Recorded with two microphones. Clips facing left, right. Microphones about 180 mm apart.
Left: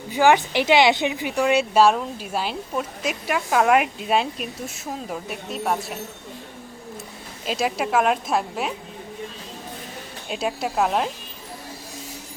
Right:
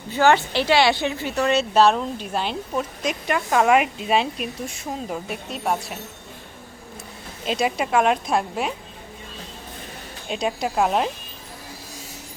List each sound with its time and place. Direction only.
0.1 s speech: 15° left (ahead or behind)
7.4 s speech: centre (ahead or behind)
10.2 s speech: centre (ahead or behind)